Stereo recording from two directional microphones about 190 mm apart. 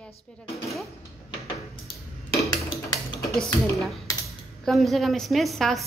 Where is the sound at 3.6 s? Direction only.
Centre (ahead or behind).